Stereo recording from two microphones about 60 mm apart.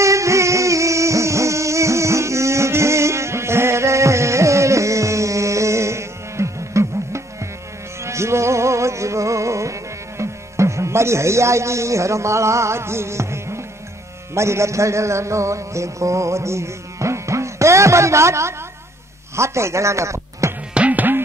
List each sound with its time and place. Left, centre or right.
0.0 s music: right
20.7 s music: right